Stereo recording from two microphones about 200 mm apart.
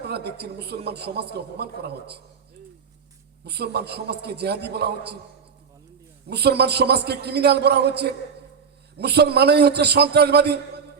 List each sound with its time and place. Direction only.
0.0 s a man's voice: 55° right (ahead or behind)
3.4 s a man's voice: 55° right (ahead or behind)
6.2 s a man's voice: 55° right (ahead or behind)